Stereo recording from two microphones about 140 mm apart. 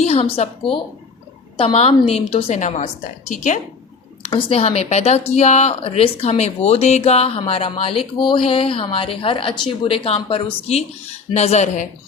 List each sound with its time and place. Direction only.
0.0 s a woman's voice: 45° left (ahead or behind); by 3.6 s 60° left (ahead or behind)
4.3 s speech: 40° left (ahead or behind); by 11.9 s 55° left (ahead or behind)